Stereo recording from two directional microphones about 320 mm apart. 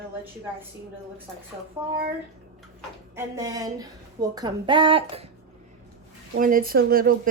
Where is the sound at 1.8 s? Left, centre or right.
Centre.